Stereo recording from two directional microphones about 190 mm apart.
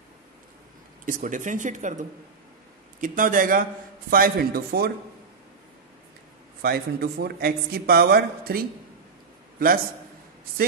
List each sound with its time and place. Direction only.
1.0 s speech: 45° right (ahead or behind)
6.6 s speech: 55° right (ahead or behind)